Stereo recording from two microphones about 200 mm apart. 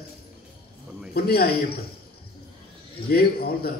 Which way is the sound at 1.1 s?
50° left (ahead or behind).